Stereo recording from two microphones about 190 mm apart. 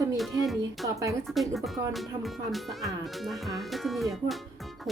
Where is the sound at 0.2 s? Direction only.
Centre (ahead or behind).